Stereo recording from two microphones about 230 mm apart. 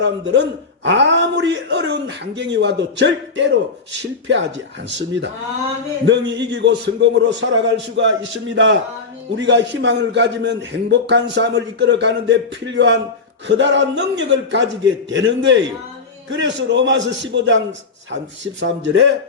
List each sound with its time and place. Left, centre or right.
0.0 s a man's voice: right